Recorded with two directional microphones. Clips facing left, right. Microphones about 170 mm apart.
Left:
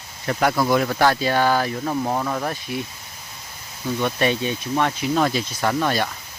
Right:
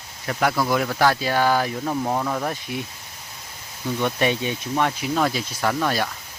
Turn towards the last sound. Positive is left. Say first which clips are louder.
# left 1 dB
turn(degrees=0)  # may be behind; listen again after turning